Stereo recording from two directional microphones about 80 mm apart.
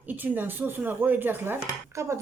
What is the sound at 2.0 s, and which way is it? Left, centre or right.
Speech, right.